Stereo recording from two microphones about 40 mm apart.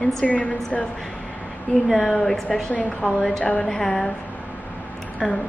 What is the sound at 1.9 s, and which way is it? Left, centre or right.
Speech, centre.